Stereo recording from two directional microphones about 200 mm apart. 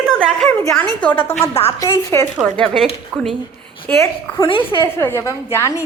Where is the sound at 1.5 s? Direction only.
30° left (ahead or behind).